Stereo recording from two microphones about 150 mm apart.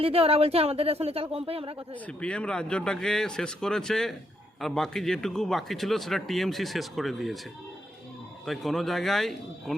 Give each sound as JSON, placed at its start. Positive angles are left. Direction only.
{"t": 0.0, "sound": "speech", "side_deg": -40}
{"t": 2.0, "sound": "a man's voice", "side_deg": 5}
{"t": 8.4, "sound": "a man's voice", "side_deg": 0}